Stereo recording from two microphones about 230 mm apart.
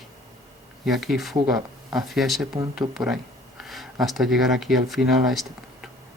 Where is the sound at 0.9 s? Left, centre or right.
Centre.